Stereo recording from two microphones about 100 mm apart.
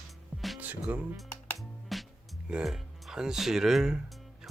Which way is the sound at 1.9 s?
Centre (ahead or behind).